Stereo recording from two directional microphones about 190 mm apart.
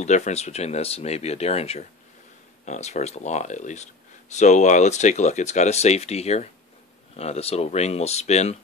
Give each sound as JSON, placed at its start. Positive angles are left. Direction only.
{"t": 0.0, "sound": "speech", "side_deg": 35}